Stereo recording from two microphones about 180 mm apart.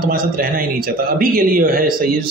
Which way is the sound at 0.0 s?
55° right (ahead or behind).